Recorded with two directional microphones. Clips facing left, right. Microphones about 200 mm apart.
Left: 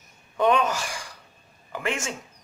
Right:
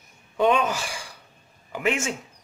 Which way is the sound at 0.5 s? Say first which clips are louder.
Left 1 dB; 5° right (ahead or behind).